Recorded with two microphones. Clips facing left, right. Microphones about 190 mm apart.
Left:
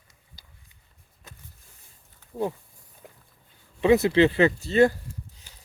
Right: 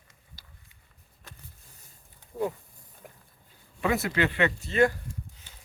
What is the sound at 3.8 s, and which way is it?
Speech, 25° left (ahead or behind).